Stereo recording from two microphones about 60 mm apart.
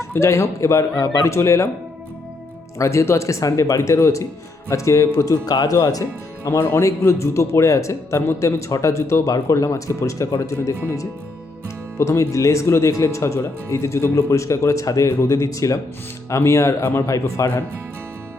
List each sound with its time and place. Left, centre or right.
0.0 s speech: left
1.3 s speech: left
2.7 s speech: left
6.7 s speech: left
11.9 s speech: left
16.3 s speech: left